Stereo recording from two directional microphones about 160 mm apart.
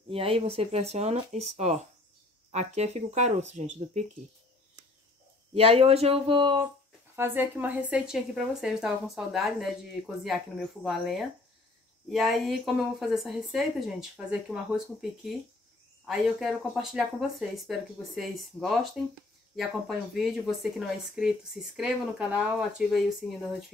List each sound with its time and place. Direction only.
0.1 s speech: 35° right (ahead or behind)
5.5 s speech: 40° right (ahead or behind)
7.2 s a woman's voice: 15° right (ahead or behind)